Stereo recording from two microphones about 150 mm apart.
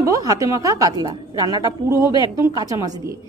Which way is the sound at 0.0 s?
20° right (ahead or behind).